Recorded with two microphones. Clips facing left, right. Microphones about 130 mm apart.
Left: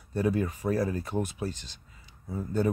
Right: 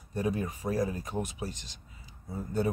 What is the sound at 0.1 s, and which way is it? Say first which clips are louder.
Speech: left 4 dB; 15° right (ahead or behind).